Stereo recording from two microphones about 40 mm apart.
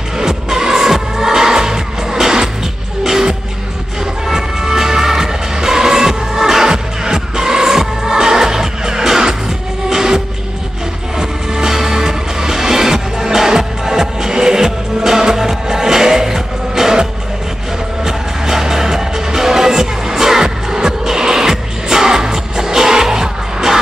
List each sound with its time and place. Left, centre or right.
0.2 s music: centre